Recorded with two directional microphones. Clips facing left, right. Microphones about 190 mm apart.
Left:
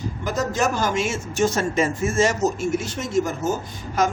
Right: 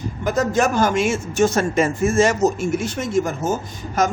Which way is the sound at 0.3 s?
55° right (ahead or behind).